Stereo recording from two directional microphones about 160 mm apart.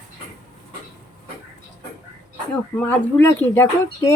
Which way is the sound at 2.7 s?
10° left (ahead or behind).